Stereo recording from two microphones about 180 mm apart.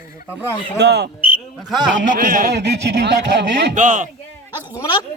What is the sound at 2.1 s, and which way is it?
Speech, 45° right (ahead or behind).